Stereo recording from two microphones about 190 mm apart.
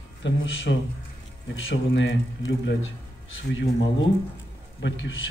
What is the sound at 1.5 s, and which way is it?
Speech, 80° left.